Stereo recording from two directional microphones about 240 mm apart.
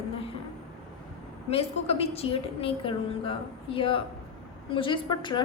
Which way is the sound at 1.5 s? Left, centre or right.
Left.